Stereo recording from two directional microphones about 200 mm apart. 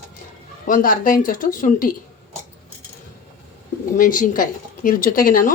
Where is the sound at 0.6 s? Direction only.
45° left (ahead or behind).